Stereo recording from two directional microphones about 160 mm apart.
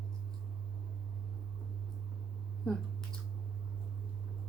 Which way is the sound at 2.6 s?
5° left (ahead or behind).